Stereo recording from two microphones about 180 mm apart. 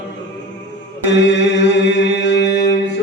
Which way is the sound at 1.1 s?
75° left (ahead or behind).